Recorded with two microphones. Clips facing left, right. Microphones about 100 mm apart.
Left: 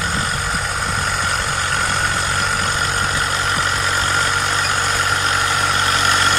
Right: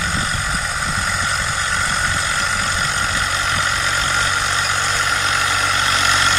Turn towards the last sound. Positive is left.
turn(degrees=5)  # may be behind; listen again after turning